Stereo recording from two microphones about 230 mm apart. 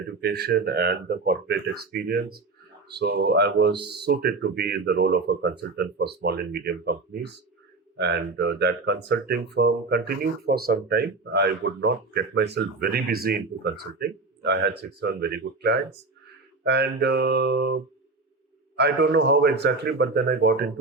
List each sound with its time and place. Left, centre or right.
0.2 s speech: right